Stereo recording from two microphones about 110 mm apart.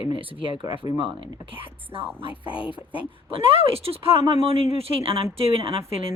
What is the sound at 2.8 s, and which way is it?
Speech, 15° right (ahead or behind).